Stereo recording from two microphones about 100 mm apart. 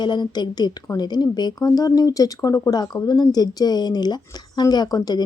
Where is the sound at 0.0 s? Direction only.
50° left (ahead or behind).